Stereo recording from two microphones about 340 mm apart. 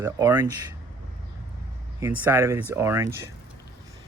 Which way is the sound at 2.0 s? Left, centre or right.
Centre.